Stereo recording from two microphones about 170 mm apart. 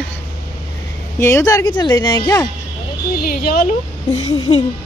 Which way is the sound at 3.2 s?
60° left (ahead or behind).